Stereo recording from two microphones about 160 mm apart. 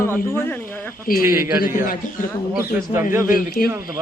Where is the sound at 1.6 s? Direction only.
60° left (ahead or behind).